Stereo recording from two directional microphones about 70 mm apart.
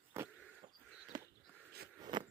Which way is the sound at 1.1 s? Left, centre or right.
Right.